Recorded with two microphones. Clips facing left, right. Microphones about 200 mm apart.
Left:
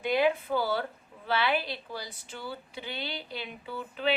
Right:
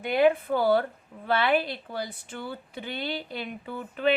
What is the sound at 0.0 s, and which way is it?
A woman's voice, 55° right (ahead or behind).